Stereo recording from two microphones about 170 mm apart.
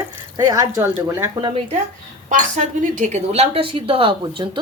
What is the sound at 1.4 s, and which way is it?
Speech, 35° right (ahead or behind).